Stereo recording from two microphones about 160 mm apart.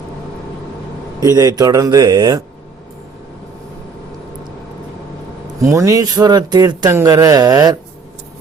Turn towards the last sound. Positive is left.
turn(degrees=-25)  # may be behind; listen again after turning